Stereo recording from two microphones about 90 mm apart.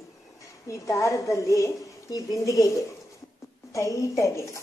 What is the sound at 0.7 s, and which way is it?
A woman's voice, 35° left (ahead or behind).